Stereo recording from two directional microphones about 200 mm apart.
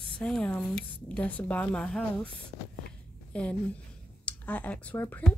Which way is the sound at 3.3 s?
5° left (ahead or behind).